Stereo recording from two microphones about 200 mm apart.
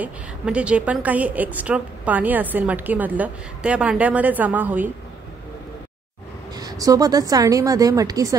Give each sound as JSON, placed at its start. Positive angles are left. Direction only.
{"t": 0.0, "sound": "a woman's voice", "side_deg": -5}
{"t": 6.5, "sound": "a woman's voice", "side_deg": -20}